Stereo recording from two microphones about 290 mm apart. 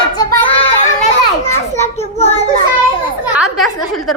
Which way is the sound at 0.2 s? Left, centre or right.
Centre.